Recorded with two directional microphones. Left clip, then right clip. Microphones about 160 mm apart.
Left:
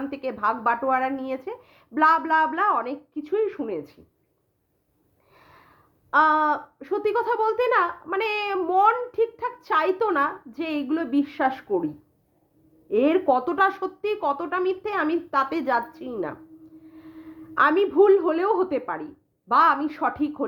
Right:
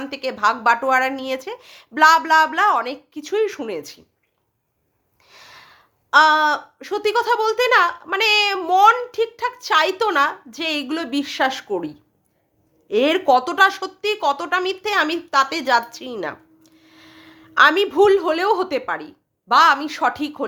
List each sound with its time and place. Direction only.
0.0 s a woman's voice: 15° right (ahead or behind)
5.3 s a child's voice: 20° right (ahead or behind)
12.9 s a child's voice: 20° right (ahead or behind)
15.3 s a child's voice: 10° right (ahead or behind)